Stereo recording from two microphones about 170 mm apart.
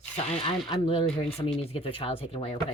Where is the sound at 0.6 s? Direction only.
30° left (ahead or behind).